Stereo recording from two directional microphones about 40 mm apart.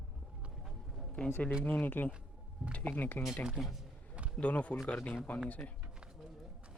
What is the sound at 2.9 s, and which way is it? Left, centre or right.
Speech, left.